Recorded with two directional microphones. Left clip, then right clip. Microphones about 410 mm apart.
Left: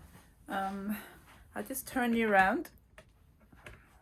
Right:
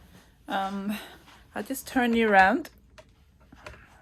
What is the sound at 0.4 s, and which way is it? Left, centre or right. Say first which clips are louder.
Speech: right 6 dB; centre.